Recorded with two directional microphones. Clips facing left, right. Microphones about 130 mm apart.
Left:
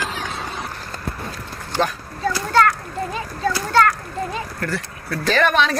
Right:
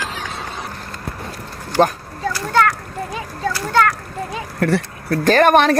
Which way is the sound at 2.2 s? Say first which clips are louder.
Even; 10° right (ahead or behind).